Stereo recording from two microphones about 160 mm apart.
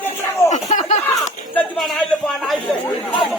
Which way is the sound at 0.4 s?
45° left (ahead or behind).